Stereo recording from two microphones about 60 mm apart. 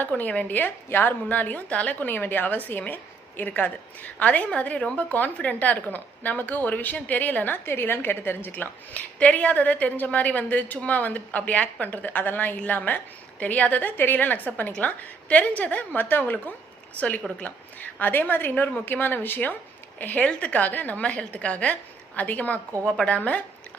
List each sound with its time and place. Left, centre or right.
0.0 s a woman's voice: left